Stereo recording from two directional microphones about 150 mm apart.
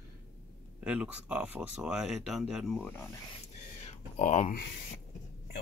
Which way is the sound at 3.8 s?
45° left (ahead or behind).